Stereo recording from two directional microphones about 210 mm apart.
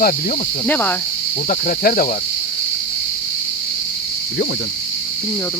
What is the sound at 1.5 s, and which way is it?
Speech, 40° left (ahead or behind).